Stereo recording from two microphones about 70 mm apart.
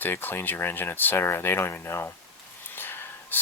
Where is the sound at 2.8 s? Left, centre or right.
Left.